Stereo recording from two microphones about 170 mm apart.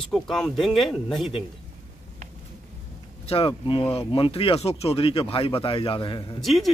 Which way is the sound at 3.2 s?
35° left (ahead or behind).